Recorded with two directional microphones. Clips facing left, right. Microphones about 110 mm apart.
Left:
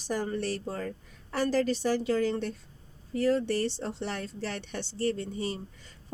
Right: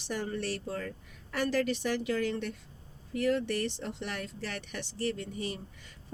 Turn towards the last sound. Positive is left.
turn(degrees=35)  # may be behind; listen again after turning